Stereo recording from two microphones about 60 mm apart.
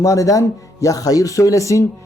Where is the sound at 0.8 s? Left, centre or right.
Left.